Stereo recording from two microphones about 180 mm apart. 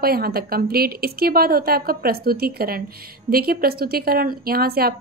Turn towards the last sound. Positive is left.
turn(degrees=-55)  # may be behind; listen again after turning